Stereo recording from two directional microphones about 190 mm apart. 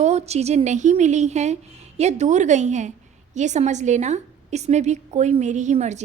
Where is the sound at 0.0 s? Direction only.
35° right (ahead or behind).